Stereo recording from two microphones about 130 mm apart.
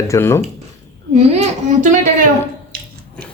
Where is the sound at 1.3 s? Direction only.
60° right (ahead or behind).